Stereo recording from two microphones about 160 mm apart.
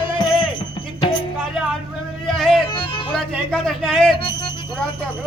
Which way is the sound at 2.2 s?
Centre (ahead or behind).